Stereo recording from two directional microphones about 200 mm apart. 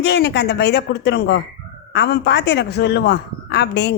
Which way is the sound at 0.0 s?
60° left (ahead or behind).